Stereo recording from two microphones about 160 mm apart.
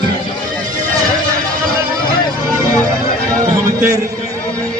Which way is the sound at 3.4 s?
20° right (ahead or behind).